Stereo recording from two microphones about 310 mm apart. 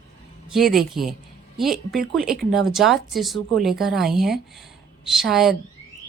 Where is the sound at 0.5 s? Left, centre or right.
Centre.